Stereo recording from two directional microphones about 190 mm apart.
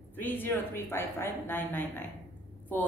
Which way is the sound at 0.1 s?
10° left (ahead or behind).